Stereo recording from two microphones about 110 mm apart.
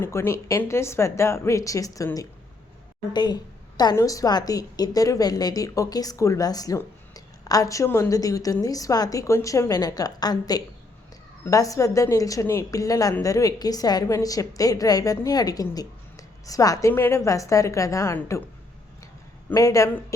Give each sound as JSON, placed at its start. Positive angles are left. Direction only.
{"t": 0.0, "sound": "a woman's voice", "side_deg": 25}
{"t": 3.1, "sound": "a woman's voice", "side_deg": 40}
{"t": 15.7, "sound": "a sound", "side_deg": 35}
{"t": 16.9, "sound": "a woman's voice", "side_deg": 25}
{"t": 19.5, "sound": "a woman's voice", "side_deg": 30}